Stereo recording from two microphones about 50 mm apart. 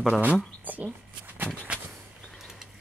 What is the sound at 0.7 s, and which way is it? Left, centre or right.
Speech, right.